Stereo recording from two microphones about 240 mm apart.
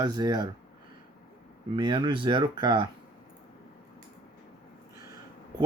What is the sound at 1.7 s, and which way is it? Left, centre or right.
Speech, centre.